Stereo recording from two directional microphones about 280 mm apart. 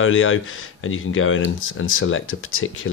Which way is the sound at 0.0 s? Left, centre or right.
Left.